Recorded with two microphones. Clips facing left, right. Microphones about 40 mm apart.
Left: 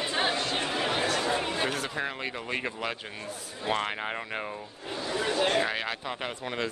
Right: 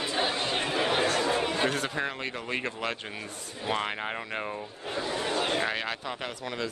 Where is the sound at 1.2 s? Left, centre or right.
Centre.